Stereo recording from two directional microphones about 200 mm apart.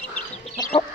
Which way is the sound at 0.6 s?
30° left (ahead or behind).